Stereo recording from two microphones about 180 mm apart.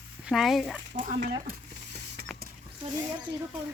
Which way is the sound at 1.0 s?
55° right (ahead or behind).